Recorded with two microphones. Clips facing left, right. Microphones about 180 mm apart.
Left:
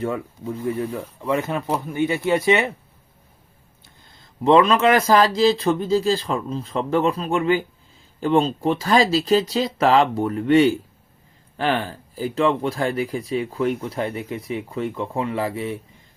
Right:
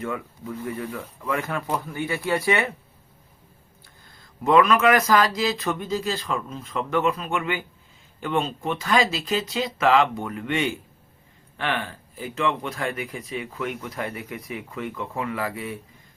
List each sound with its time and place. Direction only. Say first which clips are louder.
0.0 s speech: left 5 dB; 30° left (ahead or behind)
1.6 s speech: left 3 dB; 10° left (ahead or behind)
2.0 s speech: left 7 dB; 20° left (ahead or behind)
4.1 s speech: left 4 dB; 25° left (ahead or behind)